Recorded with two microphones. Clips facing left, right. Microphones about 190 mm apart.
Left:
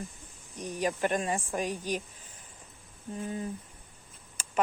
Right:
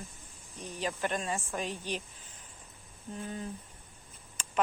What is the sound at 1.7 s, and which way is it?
Speech, 45° left (ahead or behind).